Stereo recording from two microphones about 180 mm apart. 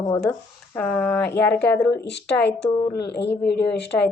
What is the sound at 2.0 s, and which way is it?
A woman's voice, 70° left (ahead or behind).